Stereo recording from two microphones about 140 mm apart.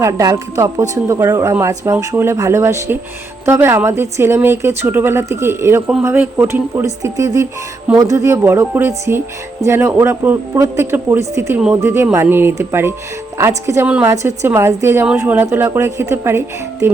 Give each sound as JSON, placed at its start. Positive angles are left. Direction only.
{"t": 0.0, "sound": "speech", "side_deg": -25}